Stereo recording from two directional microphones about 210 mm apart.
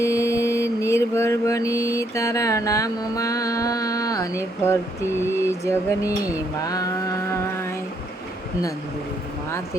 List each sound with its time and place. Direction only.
0.0 s mantra: 15° left (ahead or behind)